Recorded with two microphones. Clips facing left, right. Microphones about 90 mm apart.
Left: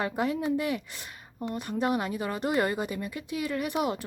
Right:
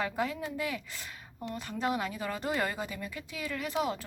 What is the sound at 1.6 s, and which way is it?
Speech, 15° left (ahead or behind).